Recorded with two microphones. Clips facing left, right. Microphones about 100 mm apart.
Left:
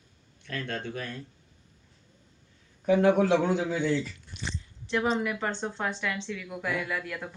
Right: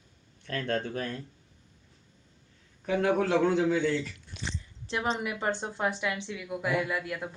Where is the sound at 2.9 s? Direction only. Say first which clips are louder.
Left 4 dB; 20° left (ahead or behind).